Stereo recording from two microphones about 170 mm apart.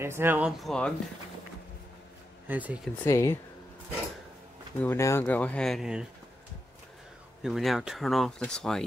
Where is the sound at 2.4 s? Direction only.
10° right (ahead or behind).